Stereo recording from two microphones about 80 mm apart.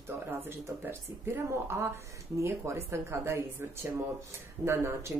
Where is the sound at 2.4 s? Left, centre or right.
Right.